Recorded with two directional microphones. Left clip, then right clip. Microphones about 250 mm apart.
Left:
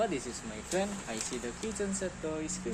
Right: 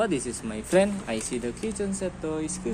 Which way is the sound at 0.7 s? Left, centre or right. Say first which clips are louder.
Right 11 dB; right.